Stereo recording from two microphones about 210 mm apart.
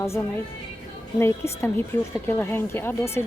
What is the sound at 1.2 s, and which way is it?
A woman's voice, 10° left (ahead or behind).